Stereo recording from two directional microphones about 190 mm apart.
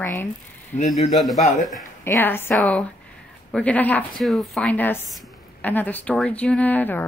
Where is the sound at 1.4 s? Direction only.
40° left (ahead or behind).